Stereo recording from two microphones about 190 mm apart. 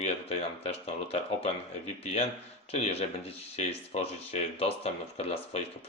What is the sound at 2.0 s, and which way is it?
Speech, 35° left (ahead or behind).